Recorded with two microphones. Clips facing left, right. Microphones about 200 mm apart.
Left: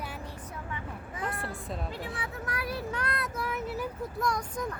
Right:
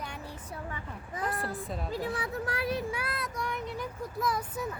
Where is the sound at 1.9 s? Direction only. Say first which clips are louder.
Right 5 dB; 40° right (ahead or behind); by 2.8 s 25° right (ahead or behind).